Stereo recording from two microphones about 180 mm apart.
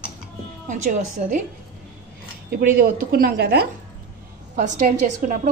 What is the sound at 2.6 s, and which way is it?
Speech, 55° right (ahead or behind).